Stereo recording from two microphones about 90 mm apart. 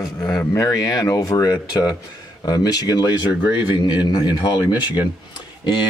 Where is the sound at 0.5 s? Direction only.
40° left (ahead or behind).